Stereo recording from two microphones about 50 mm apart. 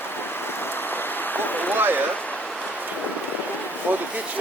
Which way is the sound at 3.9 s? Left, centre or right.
Right.